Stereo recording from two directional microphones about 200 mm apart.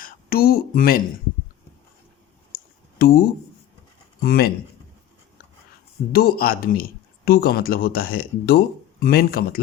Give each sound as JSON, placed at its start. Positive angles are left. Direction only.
{"t": 0.0, "sound": "speech", "side_deg": 50}
{"t": 3.0, "sound": "speech", "side_deg": 50}
{"t": 6.1, "sound": "speech", "side_deg": 50}